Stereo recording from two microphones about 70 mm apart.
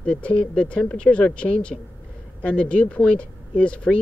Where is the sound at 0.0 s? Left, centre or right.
Centre.